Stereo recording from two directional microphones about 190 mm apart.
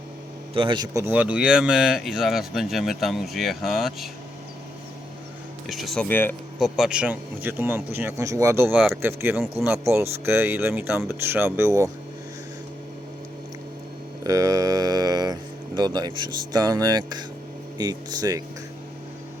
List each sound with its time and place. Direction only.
0.5 s speech: 25° right (ahead or behind); by 4.1 s centre (ahead or behind)
5.6 s speech: centre (ahead or behind)
6.6 s speech: 5° right (ahead or behind)
8.7 s speech: centre (ahead or behind)
9.0 s speech: 10° right (ahead or behind)
14.3 s speech: 15° right (ahead or behind)